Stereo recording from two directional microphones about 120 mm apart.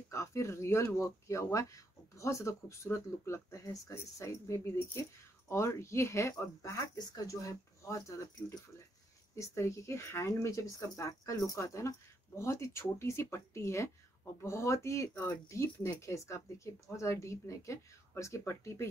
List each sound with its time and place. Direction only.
0.1 s speech: 25° left (ahead or behind)